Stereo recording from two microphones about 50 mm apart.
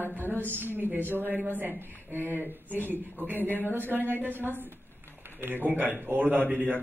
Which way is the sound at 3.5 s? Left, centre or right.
Left.